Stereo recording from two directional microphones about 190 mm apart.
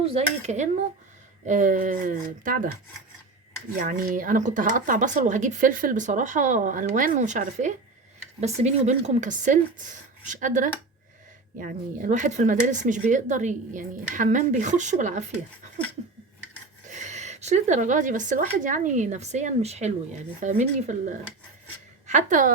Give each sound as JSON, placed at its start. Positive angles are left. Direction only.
{"t": 0.0, "sound": "speech", "side_deg": -30}
{"t": 3.8, "sound": "speech", "side_deg": -45}
{"t": 16.9, "sound": "a woman's voice", "side_deg": -40}